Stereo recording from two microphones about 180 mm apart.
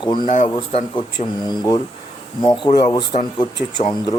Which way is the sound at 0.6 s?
25° left (ahead or behind).